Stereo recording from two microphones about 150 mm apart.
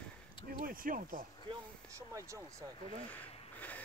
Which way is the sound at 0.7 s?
70° right (ahead or behind).